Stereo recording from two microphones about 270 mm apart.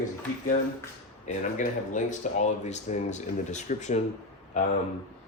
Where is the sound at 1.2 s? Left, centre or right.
Left.